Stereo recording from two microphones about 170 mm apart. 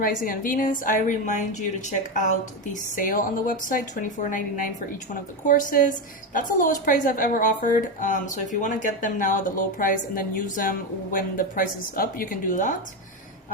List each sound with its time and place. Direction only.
0.3 s a woman's voice: 50° left (ahead or behind)